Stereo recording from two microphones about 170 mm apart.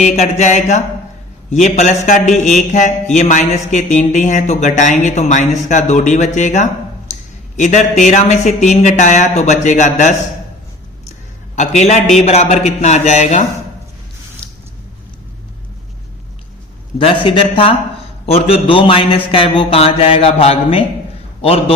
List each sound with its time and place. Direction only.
0.0 s a man's voice: 40° left (ahead or behind)
11.5 s a man's voice: 40° left (ahead or behind)
17.0 s a man's voice: 30° left (ahead or behind)